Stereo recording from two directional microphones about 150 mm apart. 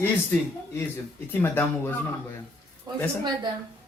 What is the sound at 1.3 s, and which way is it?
Speech, 15° left (ahead or behind).